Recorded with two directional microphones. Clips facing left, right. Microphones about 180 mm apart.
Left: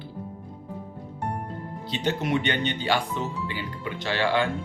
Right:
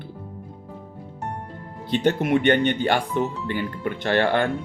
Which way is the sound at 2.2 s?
55° right (ahead or behind).